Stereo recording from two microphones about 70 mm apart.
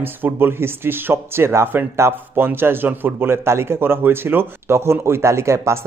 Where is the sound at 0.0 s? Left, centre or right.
Right.